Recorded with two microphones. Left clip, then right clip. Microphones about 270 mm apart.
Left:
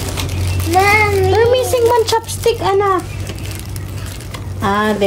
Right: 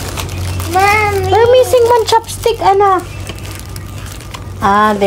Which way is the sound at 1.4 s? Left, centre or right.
Right.